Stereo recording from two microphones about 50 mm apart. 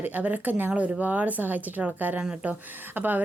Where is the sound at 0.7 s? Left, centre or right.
Right.